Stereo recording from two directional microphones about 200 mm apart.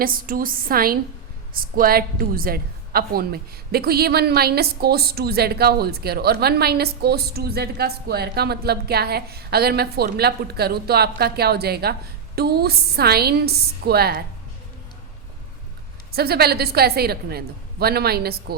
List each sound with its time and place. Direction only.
0.0 s a woman's voice: 45° right (ahead or behind)
16.1 s a woman's voice: 50° right (ahead or behind)